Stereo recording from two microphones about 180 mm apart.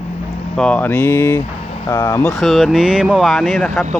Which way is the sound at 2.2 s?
Centre (ahead or behind).